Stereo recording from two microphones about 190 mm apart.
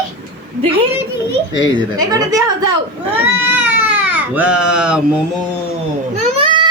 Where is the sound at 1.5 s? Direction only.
20° right (ahead or behind).